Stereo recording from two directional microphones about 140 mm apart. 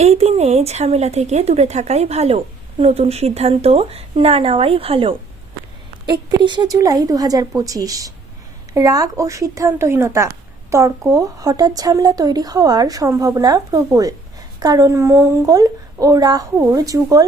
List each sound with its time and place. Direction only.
0.0 s speech: 50° right (ahead or behind); by 17.2 s 25° right (ahead or behind)